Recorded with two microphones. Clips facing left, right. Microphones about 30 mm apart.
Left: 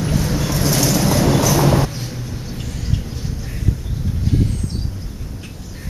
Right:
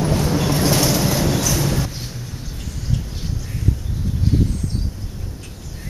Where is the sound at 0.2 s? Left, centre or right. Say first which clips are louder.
Right 2 dB; centre.